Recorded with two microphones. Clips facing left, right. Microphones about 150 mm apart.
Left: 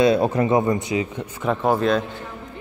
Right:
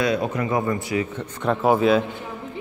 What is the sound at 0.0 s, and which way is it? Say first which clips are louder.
Speech: left 5 dB; 30° left (ahead or behind).